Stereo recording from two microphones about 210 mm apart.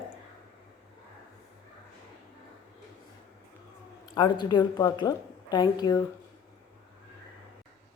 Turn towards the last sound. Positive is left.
turn(degrees=20)  # may be behind; listen again after turning